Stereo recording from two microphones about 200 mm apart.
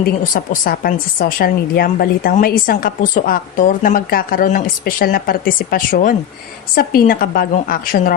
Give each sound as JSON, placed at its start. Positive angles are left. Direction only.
{"t": 0.0, "sound": "a woman's voice", "side_deg": 45}